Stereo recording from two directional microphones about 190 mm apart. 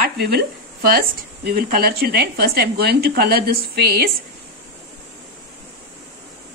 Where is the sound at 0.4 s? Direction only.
55° right (ahead or behind).